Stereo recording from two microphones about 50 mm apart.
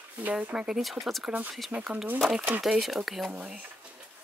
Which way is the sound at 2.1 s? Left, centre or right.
Centre.